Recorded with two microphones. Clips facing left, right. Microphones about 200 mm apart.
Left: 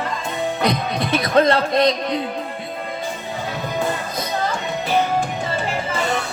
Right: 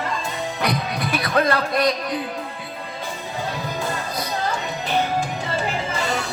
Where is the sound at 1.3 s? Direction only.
25° left (ahead or behind).